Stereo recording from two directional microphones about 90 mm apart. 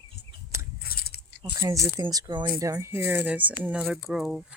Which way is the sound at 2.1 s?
50° right (ahead or behind).